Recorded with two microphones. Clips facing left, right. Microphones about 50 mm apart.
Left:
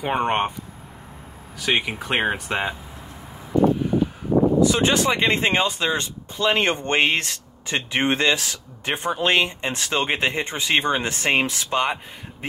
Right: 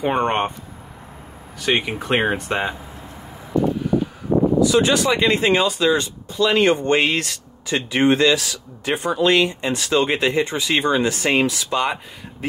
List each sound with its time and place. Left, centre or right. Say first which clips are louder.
0.0 s speech: right 2 dB; centre
1.6 s speech: right 2 dB; centre
4.6 s speech: right 2 dB; left